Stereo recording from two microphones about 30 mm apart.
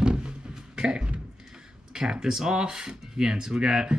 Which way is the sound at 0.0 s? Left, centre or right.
Right.